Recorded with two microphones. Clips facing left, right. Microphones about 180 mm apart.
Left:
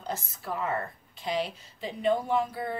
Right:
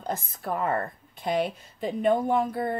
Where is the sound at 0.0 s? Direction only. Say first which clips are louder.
Right 4 dB; 50° right (ahead or behind).